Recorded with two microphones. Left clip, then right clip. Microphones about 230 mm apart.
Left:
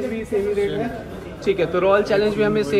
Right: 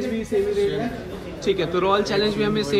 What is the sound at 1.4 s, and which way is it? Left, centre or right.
A man's voice, centre.